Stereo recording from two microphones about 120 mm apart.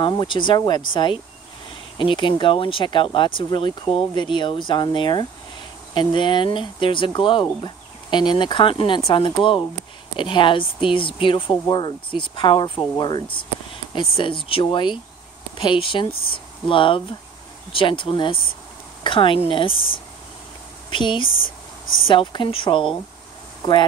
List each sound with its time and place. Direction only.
0.0 s speech: 40° left (ahead or behind)
20.9 s speech: 40° left (ahead or behind)